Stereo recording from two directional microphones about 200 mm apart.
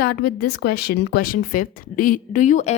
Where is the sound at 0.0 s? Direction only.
50° left (ahead or behind).